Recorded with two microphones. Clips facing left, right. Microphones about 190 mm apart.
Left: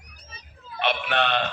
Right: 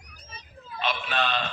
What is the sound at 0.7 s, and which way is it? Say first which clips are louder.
Speech: left 4 dB; 65° left (ahead or behind).